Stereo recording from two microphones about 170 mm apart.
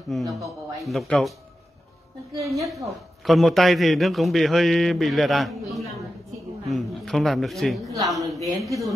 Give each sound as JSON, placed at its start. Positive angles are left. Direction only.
{"t": 0.1, "sound": "a man's voice", "side_deg": 0}
{"t": 2.5, "sound": "a man's voice", "side_deg": 0}
{"t": 7.9, "sound": "a woman's voice", "side_deg": -20}